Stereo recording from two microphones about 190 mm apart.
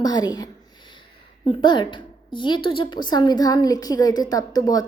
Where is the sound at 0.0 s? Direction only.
20° left (ahead or behind).